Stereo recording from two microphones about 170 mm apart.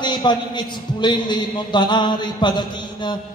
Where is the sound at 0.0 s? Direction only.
25° left (ahead or behind).